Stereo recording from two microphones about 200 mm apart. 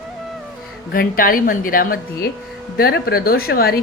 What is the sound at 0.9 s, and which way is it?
A woman's voice, 45° left (ahead or behind).